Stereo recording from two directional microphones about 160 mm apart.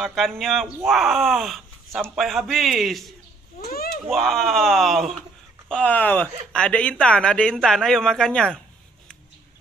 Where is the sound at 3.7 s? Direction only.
70° left (ahead or behind).